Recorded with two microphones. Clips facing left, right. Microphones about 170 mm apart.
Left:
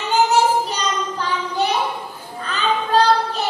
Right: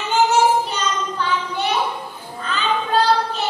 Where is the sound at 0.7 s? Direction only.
40° left (ahead or behind).